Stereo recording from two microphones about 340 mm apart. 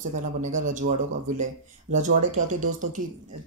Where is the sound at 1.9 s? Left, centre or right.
Right.